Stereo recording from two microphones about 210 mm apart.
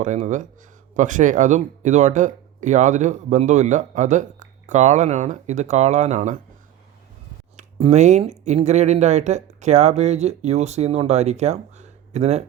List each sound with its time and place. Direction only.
0.0 s speech: 35° right (ahead or behind)
7.5 s speech: 35° right (ahead or behind)